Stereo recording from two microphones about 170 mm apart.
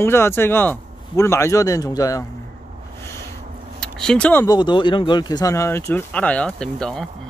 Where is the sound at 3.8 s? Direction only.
5° left (ahead or behind).